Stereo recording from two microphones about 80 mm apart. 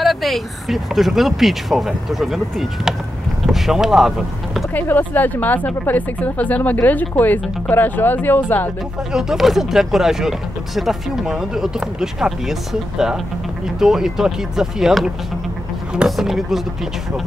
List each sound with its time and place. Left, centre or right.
0.0 s speech: centre
4.7 s a woman's voice: left
9.1 s speech: centre